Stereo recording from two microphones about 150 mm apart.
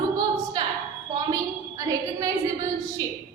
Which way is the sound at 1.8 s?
25° right (ahead or behind).